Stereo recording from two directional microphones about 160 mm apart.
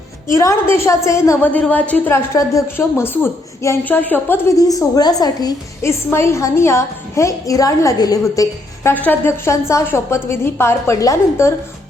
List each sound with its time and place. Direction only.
0.3 s a woman's voice: 20° left (ahead or behind)